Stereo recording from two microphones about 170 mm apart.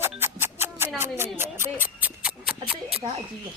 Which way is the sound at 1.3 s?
15° right (ahead or behind).